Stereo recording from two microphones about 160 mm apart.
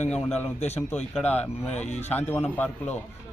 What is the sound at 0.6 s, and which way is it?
A man's voice, 45° left (ahead or behind).